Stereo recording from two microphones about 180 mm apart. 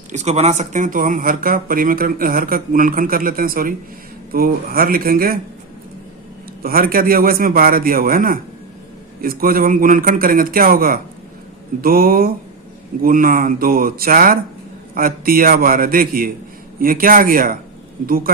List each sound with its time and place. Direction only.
0.1 s speech: 40° right (ahead or behind)
6.6 s speech: 55° right (ahead or behind)